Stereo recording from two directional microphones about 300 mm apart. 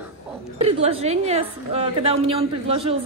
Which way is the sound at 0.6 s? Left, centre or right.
Centre.